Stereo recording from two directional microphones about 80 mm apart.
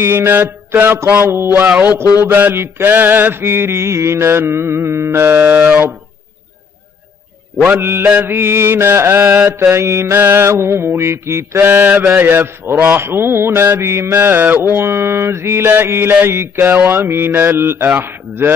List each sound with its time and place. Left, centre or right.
0.0 s mantra: right
7.8 s mantra: right